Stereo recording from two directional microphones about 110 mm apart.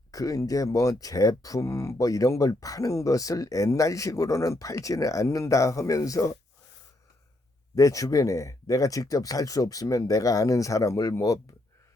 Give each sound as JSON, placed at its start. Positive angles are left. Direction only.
{"t": 0.1, "sound": "speech", "side_deg": 30}
{"t": 7.8, "sound": "speech", "side_deg": 30}